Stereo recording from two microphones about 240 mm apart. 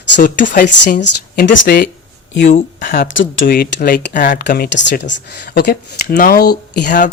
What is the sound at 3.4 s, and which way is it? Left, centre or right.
Speech, left.